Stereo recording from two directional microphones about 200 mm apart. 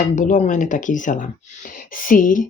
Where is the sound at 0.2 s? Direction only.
40° left (ahead or behind).